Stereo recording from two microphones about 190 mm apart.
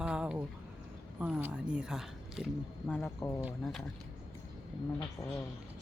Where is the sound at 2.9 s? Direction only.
10° left (ahead or behind).